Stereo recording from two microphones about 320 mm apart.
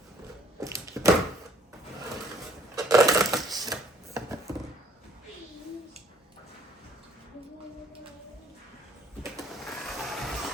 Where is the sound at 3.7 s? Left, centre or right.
Centre.